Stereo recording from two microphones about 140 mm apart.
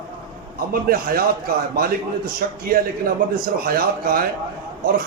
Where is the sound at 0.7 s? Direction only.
90° right.